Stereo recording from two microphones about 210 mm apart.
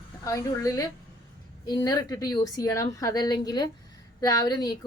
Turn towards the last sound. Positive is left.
turn(degrees=20)  # may be behind; listen again after turning